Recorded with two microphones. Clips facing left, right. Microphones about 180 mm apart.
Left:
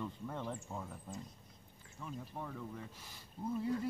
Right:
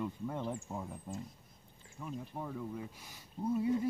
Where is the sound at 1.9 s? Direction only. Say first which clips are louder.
Right 3 dB; 10° right (ahead or behind).